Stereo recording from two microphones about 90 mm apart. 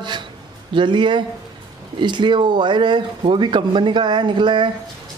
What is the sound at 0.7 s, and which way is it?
Speech, 65° right (ahead or behind).